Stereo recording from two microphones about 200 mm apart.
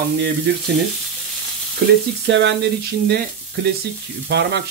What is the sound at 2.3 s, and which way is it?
Frying, 60° right (ahead or behind).